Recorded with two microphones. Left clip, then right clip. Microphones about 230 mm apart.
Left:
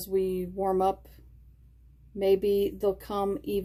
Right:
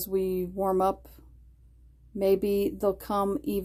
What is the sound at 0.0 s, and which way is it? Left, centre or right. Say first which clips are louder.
A woman's voice: even; right.